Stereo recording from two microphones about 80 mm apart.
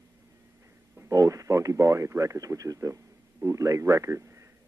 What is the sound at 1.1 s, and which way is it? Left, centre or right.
Speech, right.